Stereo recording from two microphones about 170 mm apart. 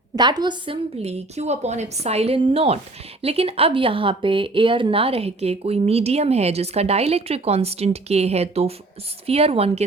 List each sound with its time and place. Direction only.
0.2 s a woman's voice: 25° right (ahead or behind)